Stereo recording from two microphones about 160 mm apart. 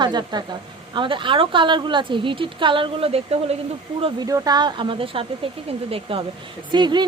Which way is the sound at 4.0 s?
25° right (ahead or behind).